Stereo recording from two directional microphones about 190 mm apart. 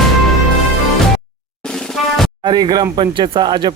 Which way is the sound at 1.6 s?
5° left (ahead or behind).